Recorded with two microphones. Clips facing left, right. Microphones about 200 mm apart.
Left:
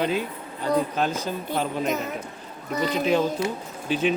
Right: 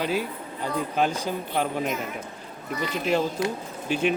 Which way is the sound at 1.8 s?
40° left (ahead or behind).